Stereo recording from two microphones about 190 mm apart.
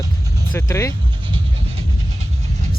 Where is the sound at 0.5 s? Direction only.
15° left (ahead or behind).